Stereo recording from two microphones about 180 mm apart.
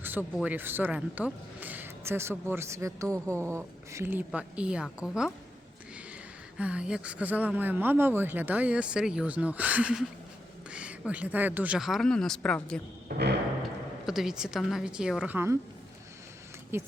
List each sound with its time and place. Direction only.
0.0 s a woman's voice: 10° right (ahead or behind)
6.6 s a woman's voice: 5° right (ahead or behind)
13.1 s a sound: 65° right (ahead or behind)
14.1 s speech: 5° right (ahead or behind)
16.7 s a woman's voice: 15° right (ahead or behind)